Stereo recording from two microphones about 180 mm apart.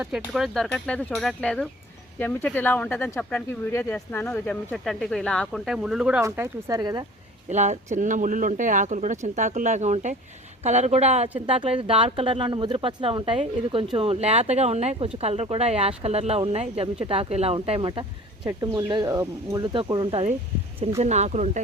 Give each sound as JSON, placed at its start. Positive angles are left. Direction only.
{"t": 0.3, "sound": "speech", "side_deg": 0}
{"t": 7.5, "sound": "speech", "side_deg": -40}